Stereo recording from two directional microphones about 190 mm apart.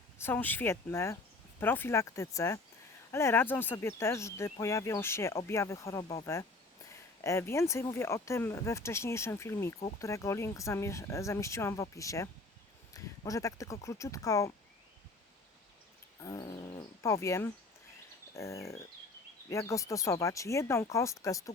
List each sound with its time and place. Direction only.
0.2 s speech: 10° left (ahead or behind)
16.2 s speech: 20° left (ahead or behind)